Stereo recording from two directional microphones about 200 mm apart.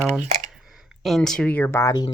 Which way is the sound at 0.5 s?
Centre (ahead or behind).